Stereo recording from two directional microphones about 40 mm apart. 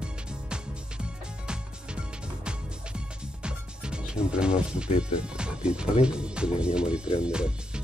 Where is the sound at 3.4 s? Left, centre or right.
Right.